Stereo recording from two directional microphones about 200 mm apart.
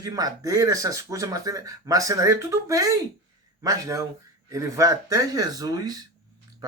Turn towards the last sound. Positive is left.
turn(degrees=-20)  # may be behind; listen again after turning